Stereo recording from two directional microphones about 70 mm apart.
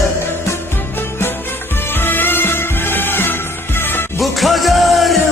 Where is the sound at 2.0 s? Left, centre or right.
Left.